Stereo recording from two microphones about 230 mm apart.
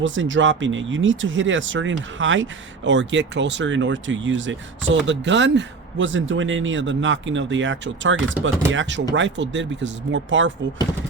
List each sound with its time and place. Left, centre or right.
0.0 s speech: right